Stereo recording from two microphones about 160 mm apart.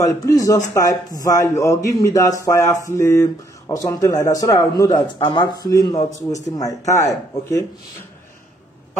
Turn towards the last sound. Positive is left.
turn(degrees=20)  # may be behind; listen again after turning